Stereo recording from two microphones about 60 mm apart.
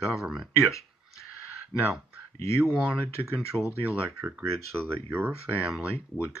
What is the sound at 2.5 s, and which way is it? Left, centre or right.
Speech, centre.